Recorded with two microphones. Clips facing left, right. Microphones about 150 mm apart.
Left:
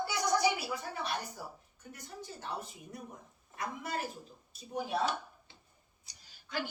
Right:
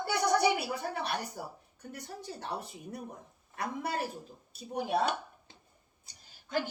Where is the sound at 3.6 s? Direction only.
60° right (ahead or behind).